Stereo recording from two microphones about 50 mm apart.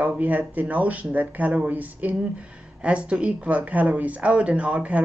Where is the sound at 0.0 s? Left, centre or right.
Right.